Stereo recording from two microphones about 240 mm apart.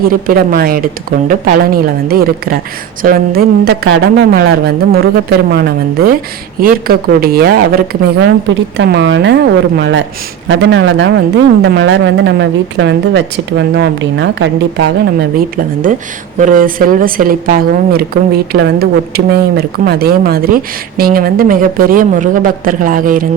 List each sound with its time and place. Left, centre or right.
0.0 s a woman's voice: right
16.4 s a woman's voice: right